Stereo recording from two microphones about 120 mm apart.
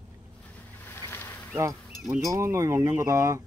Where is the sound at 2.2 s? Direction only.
25° right (ahead or behind).